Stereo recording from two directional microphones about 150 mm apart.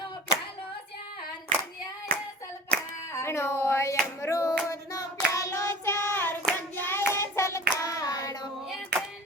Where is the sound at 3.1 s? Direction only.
15° left (ahead or behind).